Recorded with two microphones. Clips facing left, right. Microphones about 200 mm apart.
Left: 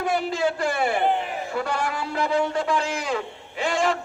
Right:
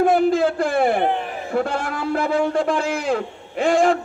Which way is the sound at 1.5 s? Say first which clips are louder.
Right 5 dB; 50° right (ahead or behind).